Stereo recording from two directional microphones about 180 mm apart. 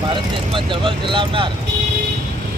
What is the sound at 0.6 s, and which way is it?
Speech, 25° right (ahead or behind).